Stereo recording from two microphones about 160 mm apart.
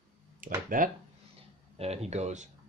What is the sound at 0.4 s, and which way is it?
Speech, 60° right (ahead or behind).